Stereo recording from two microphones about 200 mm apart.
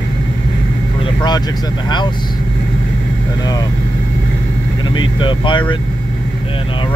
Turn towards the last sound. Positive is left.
turn(degrees=25)  # may be behind; listen again after turning